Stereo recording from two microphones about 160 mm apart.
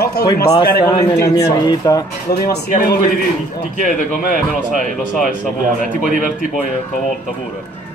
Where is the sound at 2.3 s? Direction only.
70° left (ahead or behind).